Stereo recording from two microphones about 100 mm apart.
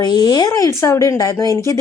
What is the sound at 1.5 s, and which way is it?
Speech, 35° right (ahead or behind).